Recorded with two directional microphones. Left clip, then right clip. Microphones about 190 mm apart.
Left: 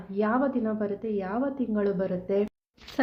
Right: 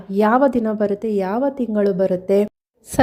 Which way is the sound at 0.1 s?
50° right (ahead or behind).